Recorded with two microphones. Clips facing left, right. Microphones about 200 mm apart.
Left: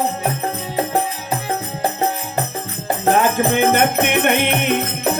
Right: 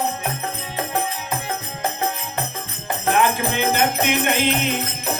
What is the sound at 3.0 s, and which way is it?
Music, 45° left (ahead or behind).